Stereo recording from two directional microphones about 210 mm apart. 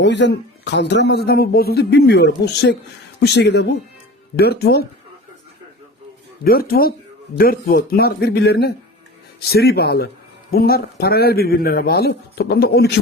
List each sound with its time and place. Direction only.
0.0 s a man's voice: 55° left (ahead or behind)
6.4 s a man's voice: 45° left (ahead or behind)